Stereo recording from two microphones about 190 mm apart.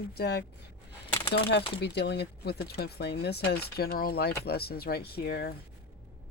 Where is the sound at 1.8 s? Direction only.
60° left (ahead or behind).